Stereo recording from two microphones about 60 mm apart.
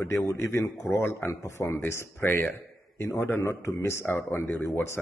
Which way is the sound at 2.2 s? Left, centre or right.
Left.